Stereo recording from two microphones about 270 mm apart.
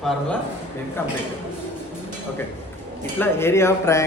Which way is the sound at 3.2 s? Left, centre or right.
Centre.